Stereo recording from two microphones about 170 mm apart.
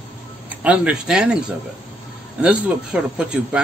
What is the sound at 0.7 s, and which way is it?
Speech, 5° right (ahead or behind).